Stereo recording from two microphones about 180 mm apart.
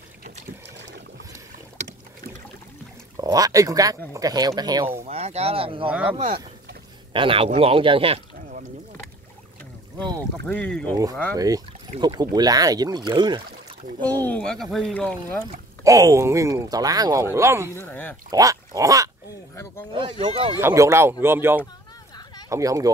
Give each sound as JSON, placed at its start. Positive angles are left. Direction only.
{"t": 3.2, "sound": "speech", "side_deg": -20}
{"t": 5.0, "sound": "speech", "side_deg": -35}
{"t": 5.9, "sound": "speech", "side_deg": -5}
{"t": 7.1, "sound": "speech", "side_deg": -30}
{"t": 10.4, "sound": "speech", "side_deg": 5}
{"t": 11.3, "sound": "speech", "side_deg": -20}
{"t": 14.0, "sound": "speech", "side_deg": 10}
{"t": 15.8, "sound": "speech", "side_deg": -20}
{"t": 17.7, "sound": "speech", "side_deg": 10}
{"t": 18.3, "sound": "speech", "side_deg": -20}
{"t": 19.9, "sound": "speech", "side_deg": -30}
{"t": 20.5, "sound": "speech", "side_deg": -15}